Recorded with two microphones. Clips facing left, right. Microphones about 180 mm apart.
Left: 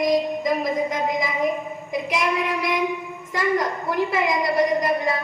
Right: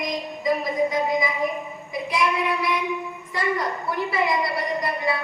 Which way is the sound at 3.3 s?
45° left (ahead or behind).